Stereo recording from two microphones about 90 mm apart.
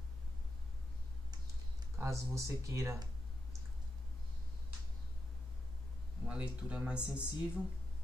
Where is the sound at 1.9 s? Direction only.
35° right (ahead or behind).